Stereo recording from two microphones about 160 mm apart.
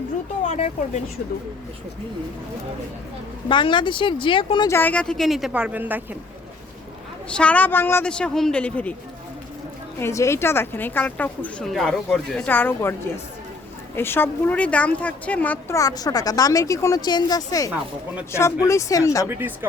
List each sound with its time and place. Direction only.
0.4 s speech: 45° left (ahead or behind)
3.5 s speech: 30° left (ahead or behind)
4.7 s speech: 10° left (ahead or behind); by 6.0 s 10° right (ahead or behind)
7.3 s a woman's voice: 5° left (ahead or behind)
10.0 s a woman's voice: 20° left (ahead or behind)
17.7 s speech: 10° right (ahead or behind)
18.3 s a woman's voice: 15° left (ahead or behind)
19.3 s speech: 10° right (ahead or behind)